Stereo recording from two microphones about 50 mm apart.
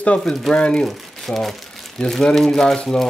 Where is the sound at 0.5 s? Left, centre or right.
Left.